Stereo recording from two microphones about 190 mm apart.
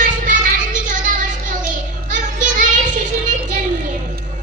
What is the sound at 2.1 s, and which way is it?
Child singing, 40° right (ahead or behind).